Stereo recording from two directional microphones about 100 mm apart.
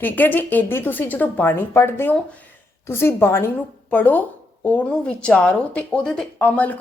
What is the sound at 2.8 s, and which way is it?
A woman's voice, 25° left (ahead or behind).